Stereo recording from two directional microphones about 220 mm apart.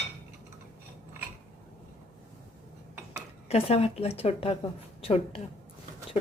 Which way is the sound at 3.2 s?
30° left (ahead or behind).